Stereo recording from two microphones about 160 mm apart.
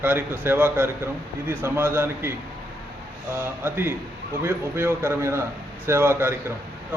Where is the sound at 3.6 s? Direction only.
15° right (ahead or behind).